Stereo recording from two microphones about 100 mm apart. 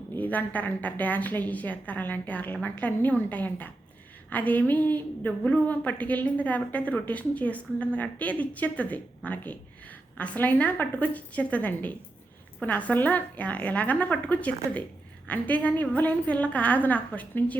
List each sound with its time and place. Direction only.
0.2 s a woman's voice: 15° left (ahead or behind)